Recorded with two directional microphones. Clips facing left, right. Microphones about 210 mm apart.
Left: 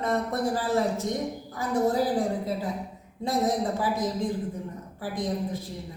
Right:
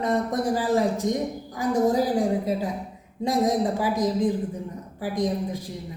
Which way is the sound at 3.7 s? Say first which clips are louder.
Right 4 dB; 15° right (ahead or behind).